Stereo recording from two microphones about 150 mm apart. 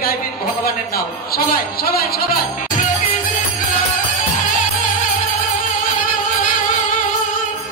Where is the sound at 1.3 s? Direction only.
90° left.